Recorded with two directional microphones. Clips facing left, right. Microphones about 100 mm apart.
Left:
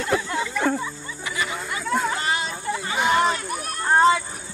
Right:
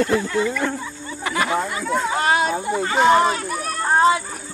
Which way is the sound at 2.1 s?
50° right (ahead or behind).